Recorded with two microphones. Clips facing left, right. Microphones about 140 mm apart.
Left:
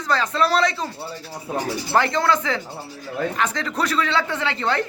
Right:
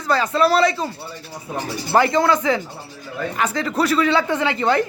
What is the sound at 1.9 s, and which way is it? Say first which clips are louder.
A man's voice: right 4 dB; 10° right (ahead or behind).